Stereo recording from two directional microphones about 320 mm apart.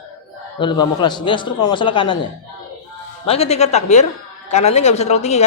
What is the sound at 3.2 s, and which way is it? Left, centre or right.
Speech, centre.